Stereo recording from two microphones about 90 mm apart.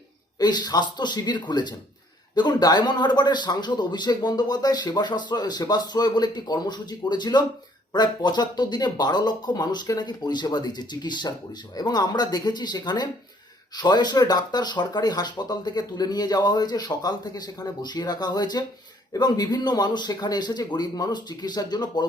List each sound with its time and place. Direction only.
0.3 s a man's voice: 50° left (ahead or behind)